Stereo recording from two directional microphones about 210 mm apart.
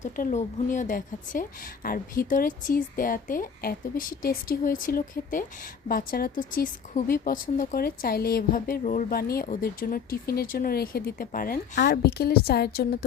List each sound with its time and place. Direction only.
0.0 s a woman's voice: 35° left (ahead or behind)